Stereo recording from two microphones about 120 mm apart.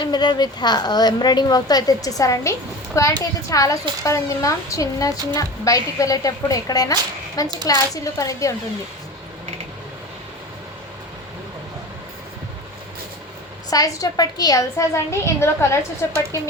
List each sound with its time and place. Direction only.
0.0 s a woman's voice: 35° left (ahead or behind)
13.7 s speech: 30° left (ahead or behind)